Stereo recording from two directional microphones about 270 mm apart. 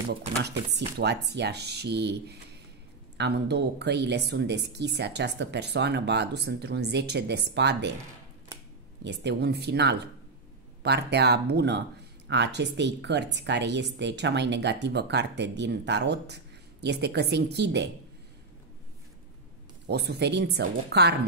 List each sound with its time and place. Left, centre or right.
0.4 s a woman's voice: right
9.0 s a woman's voice: right
19.9 s a woman's voice: right